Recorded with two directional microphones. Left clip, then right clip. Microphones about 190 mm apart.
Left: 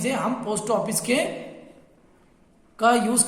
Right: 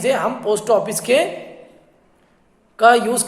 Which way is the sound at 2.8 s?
10° right (ahead or behind).